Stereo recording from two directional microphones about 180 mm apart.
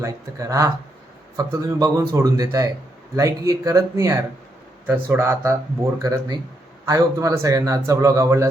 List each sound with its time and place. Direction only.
0.0 s speech: 15° right (ahead or behind)